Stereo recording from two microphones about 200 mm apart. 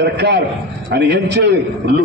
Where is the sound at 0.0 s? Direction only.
60° right (ahead or behind).